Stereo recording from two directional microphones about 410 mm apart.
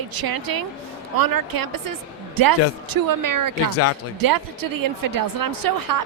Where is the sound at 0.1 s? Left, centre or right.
Right.